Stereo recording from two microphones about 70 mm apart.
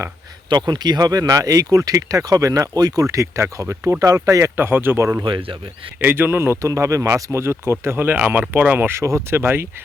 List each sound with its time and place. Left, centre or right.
0.5 s speech: right
4.5 s speech: right
6.6 s speech: right
8.9 s speech: right
9.3 s speech: right